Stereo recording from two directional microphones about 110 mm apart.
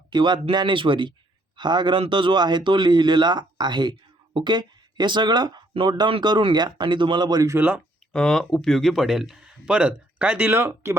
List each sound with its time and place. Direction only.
0.1 s speech: 45° right (ahead or behind)
7.5 s speech: 15° right (ahead or behind)
8.1 s speech: 5° left (ahead or behind); by 10.9 s 20° right (ahead or behind)